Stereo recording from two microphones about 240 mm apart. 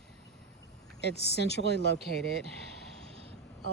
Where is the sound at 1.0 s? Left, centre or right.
Left.